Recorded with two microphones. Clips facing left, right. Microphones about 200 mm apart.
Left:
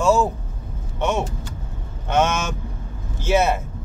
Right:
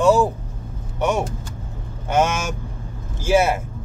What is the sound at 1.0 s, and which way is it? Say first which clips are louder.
Speech: right 2 dB; 10° right (ahead or behind).